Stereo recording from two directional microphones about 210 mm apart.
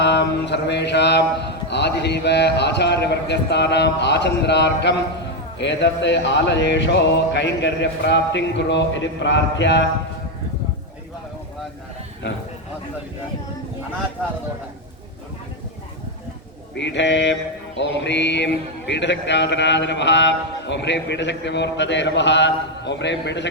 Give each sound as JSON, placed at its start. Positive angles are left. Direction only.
{"t": 0.0, "sound": "a man's voice", "side_deg": 55}
{"t": 16.7, "sound": "a man's voice", "side_deg": 60}